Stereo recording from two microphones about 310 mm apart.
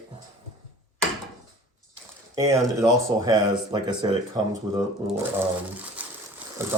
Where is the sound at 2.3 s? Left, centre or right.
Centre.